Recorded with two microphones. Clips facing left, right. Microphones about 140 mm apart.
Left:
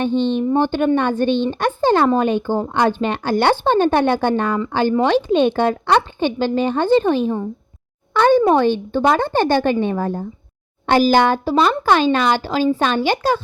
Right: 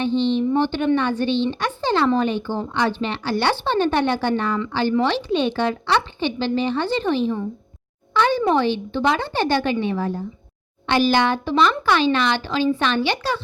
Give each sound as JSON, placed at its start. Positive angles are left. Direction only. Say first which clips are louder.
{"t": 0.0, "sound": "speech", "louder": "left 2 dB", "side_deg": 50}